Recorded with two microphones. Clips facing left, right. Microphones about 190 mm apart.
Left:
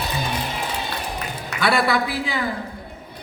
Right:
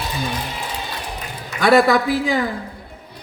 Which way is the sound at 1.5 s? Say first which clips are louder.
Right 6 dB; 45° right (ahead or behind).